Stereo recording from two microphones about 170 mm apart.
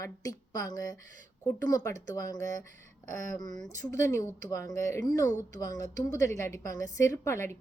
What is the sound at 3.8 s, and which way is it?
Speech, 20° left (ahead or behind).